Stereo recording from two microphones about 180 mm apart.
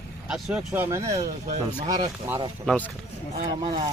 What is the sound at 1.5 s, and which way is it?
Speech, 40° right (ahead or behind).